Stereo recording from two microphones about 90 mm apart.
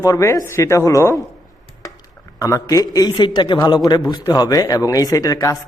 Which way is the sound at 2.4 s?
40° left (ahead or behind).